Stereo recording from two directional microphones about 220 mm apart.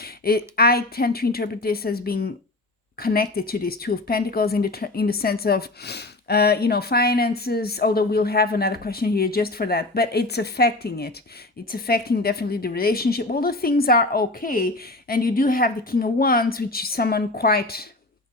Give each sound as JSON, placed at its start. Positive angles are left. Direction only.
{"t": 0.0, "sound": "a woman's voice", "side_deg": 45}